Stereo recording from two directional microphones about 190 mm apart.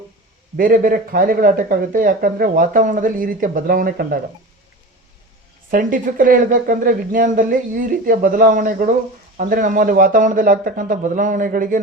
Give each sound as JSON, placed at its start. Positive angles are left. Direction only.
{"t": 0.5, "sound": "speech", "side_deg": -50}
{"t": 5.7, "sound": "speech", "side_deg": -50}